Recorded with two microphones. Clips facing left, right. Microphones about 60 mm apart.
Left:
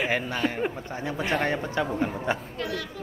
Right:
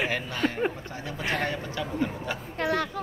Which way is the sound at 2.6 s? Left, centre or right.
Right.